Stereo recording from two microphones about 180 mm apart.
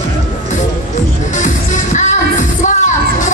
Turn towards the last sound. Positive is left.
turn(degrees=45)  # may be behind; listen again after turning